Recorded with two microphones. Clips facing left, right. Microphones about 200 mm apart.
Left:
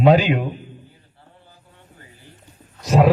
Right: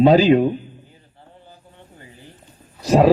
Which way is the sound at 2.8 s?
35° right (ahead or behind).